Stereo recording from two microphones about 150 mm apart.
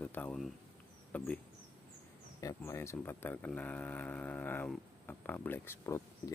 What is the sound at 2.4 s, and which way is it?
Speech, 20° left (ahead or behind).